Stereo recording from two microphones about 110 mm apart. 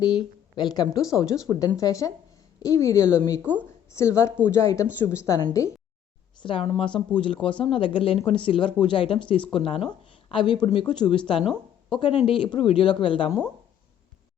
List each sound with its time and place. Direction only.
0.0 s a woman's voice: 40° left (ahead or behind)
6.4 s speech: 55° left (ahead or behind)